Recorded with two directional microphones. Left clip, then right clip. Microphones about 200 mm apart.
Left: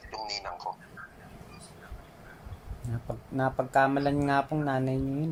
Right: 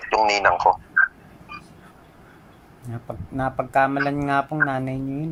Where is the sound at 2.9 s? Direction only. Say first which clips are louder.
Right 4 dB; centre (ahead or behind).